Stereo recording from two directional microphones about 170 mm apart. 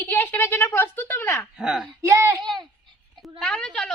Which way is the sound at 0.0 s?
10° left (ahead or behind).